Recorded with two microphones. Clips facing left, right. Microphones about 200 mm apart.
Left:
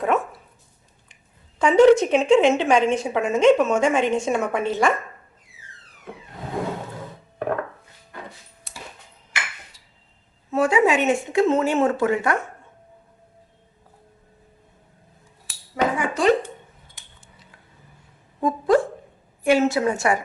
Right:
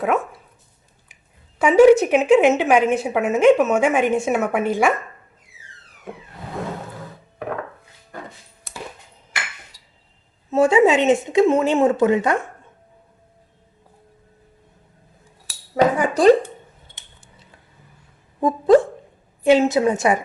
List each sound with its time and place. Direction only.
0.0 s speech: centre (ahead or behind)
1.5 s a woman's voice: 10° right (ahead or behind)
9.7 s a sound: 35° right (ahead or behind)
10.5 s speech: 25° right (ahead or behind)
15.7 s cutlery: 35° right (ahead or behind)
18.3 s dog: 20° right (ahead or behind)
19.5 s speech: 20° right (ahead or behind)